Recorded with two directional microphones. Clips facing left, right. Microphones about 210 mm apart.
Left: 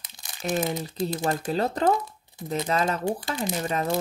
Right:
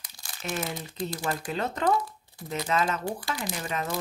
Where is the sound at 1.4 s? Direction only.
35° left (ahead or behind).